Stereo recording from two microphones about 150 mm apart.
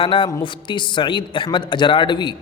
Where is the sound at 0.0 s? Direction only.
35° left (ahead or behind).